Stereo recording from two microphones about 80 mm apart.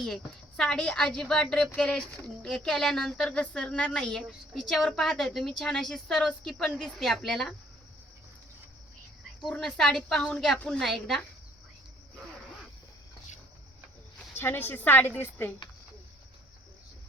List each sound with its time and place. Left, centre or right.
0.0 s a woman's voice: centre
9.5 s a woman's voice: centre
14.3 s a woman's voice: left